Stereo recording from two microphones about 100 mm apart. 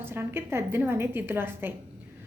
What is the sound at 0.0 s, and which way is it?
Speech, 25° right (ahead or behind).